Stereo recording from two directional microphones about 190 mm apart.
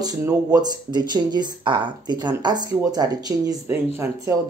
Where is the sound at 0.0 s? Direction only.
20° right (ahead or behind).